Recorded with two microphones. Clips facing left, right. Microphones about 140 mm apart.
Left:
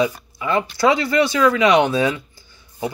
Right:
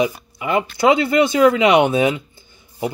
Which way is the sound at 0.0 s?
15° right (ahead or behind).